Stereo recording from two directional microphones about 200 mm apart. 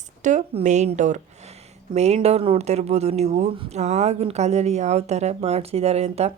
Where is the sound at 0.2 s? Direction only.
35° right (ahead or behind).